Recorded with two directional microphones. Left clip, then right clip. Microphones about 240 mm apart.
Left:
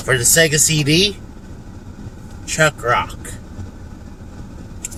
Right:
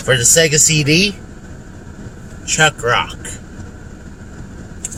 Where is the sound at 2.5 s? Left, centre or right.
Centre.